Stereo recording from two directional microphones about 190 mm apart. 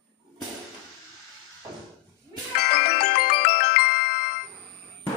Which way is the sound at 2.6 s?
55° left (ahead or behind).